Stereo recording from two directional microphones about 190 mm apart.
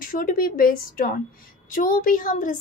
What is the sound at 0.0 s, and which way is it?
Speech, 50° left (ahead or behind).